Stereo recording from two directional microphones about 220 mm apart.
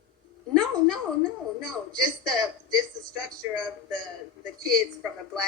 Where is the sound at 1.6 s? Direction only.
Centre (ahead or behind).